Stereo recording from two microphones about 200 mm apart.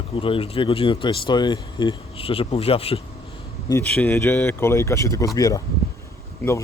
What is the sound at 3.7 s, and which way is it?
Speech, 10° left (ahead or behind).